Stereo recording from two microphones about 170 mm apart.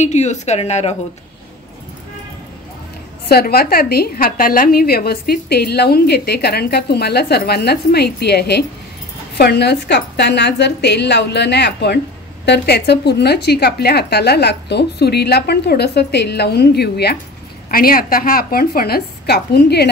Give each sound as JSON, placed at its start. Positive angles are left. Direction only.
{"t": 0.0, "sound": "speech", "side_deg": 40}
{"t": 3.3, "sound": "a woman's voice", "side_deg": 65}
{"t": 17.6, "sound": "a woman's voice", "side_deg": 60}